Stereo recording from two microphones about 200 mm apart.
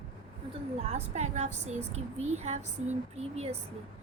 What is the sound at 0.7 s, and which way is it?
A woman's voice, 30° right (ahead or behind).